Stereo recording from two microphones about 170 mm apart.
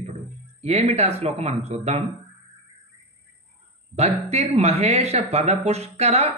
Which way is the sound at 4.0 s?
40° right (ahead or behind).